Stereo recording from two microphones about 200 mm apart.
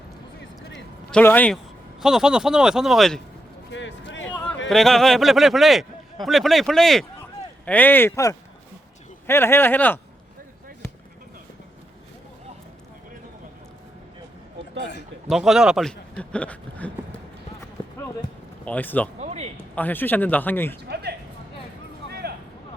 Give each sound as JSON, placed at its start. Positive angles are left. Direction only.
{"t": 1.1, "sound": "speech", "side_deg": 10}
{"t": 2.0, "sound": "a man's voice", "side_deg": -5}
{"t": 3.7, "sound": "a sound", "side_deg": 65}
{"t": 4.7, "sound": "a man's voice", "side_deg": 0}
{"t": 15.3, "sound": "a man's voice", "side_deg": 0}
{"t": 18.6, "sound": "speech", "side_deg": 10}
{"t": 19.2, "sound": "a sound", "side_deg": -35}
{"t": 19.7, "sound": "speech", "side_deg": 10}
{"t": 20.8, "sound": "a sound", "side_deg": -55}